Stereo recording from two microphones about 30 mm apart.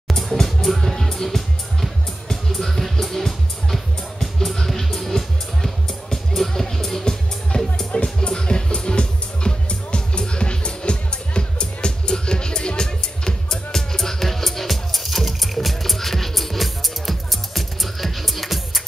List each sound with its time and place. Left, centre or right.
0.2 s music: centre
0.7 s music: centre
7.9 s music: left
13.7 s music: centre